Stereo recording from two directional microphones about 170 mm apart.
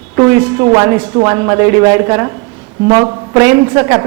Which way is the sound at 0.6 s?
20° right (ahead or behind).